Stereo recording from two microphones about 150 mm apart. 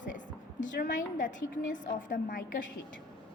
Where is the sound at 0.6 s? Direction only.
60° left (ahead or behind).